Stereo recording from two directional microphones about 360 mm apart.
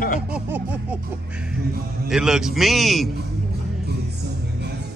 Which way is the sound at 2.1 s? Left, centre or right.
Centre.